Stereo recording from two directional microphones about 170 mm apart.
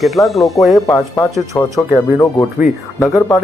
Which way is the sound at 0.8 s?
20° left (ahead or behind).